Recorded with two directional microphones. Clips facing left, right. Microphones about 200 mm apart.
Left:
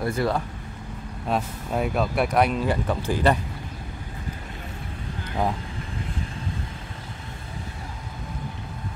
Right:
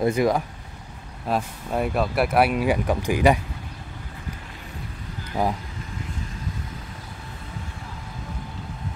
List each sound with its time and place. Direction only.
0.0 s speech: 15° right (ahead or behind)
1.2 s speech: centre (ahead or behind)